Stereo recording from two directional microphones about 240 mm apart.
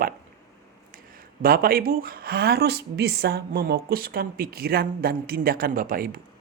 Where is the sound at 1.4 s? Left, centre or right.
Right.